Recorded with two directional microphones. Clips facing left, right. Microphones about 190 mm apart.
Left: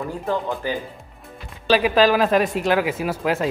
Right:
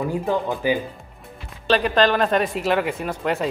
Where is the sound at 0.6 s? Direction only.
10° right (ahead or behind).